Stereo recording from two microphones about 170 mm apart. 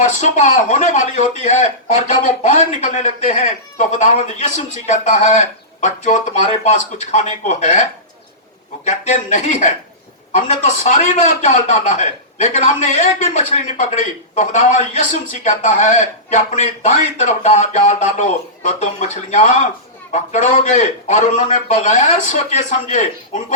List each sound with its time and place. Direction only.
0.0 s a man's voice: 45° left (ahead or behind)
2.2 s a man's voice: 45° left (ahead or behind)